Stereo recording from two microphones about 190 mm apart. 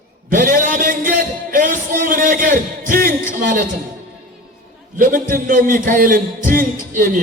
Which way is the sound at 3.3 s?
45° right (ahead or behind).